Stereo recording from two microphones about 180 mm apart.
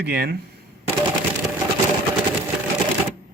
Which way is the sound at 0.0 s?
60° right (ahead or behind).